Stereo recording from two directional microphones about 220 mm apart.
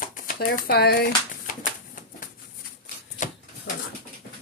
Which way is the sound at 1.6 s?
35° left (ahead or behind).